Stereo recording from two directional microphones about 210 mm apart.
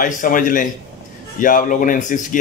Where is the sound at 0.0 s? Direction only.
40° left (ahead or behind).